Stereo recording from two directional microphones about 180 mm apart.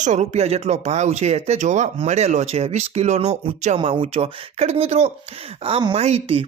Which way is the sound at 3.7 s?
30° right (ahead or behind).